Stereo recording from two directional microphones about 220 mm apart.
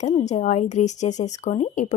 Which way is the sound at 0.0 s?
30° left (ahead or behind).